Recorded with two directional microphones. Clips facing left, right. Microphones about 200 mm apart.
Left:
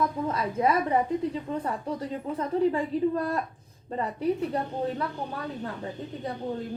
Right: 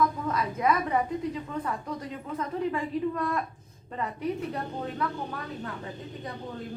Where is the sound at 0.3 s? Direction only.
30° left (ahead or behind).